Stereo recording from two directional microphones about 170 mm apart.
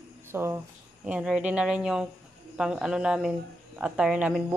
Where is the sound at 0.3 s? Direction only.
15° right (ahead or behind).